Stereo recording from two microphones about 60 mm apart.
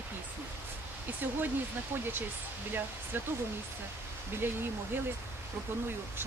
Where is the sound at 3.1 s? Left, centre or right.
Right.